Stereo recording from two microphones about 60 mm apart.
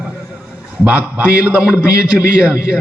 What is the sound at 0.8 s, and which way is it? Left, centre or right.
Speech, right.